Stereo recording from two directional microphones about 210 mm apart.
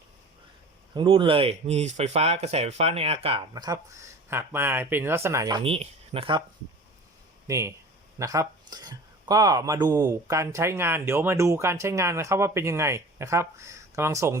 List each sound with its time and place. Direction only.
0.9 s speech: 25° right (ahead or behind)
7.4 s speech: 15° right (ahead or behind)